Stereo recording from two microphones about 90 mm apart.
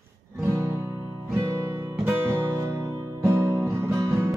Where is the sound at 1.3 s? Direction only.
35° right (ahead or behind).